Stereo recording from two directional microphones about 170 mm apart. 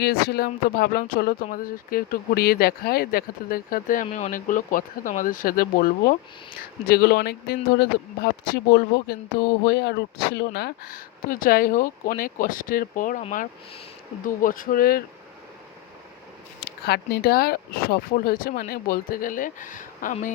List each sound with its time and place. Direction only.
0.0 s speech: 65° left (ahead or behind)
4.0 s speech: 45° left (ahead or behind)
14.3 s speech: 55° left (ahead or behind)
16.6 s speech: 75° left (ahead or behind); by 20.3 s 50° left (ahead or behind)